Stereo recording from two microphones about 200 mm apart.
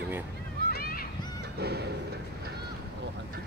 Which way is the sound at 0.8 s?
45° left (ahead or behind).